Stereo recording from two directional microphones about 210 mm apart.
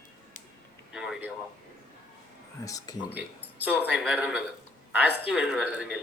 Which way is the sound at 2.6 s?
15° left (ahead or behind).